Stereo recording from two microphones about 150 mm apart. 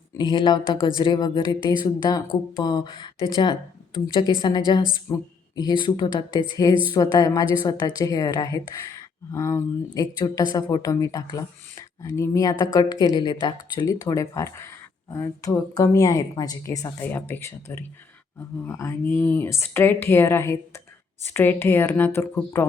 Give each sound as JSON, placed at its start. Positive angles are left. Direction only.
{"t": 0.2, "sound": "speech", "side_deg": 30}
{"t": 5.1, "sound": "speech", "side_deg": 15}
{"t": 5.5, "sound": "speech", "side_deg": 30}